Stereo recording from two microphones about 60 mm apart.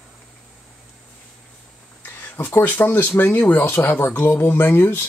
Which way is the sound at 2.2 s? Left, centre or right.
Left.